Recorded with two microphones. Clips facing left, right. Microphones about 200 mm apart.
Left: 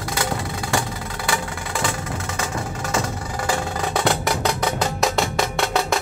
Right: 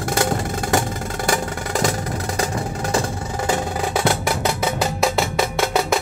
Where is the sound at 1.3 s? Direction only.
40° right (ahead or behind).